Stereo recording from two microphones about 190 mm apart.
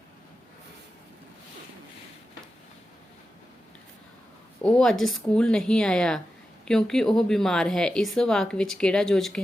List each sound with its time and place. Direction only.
4.6 s a woman's voice: centre (ahead or behind)